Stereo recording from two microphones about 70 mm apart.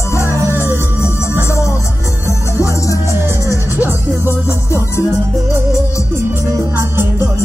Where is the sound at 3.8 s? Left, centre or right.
Right.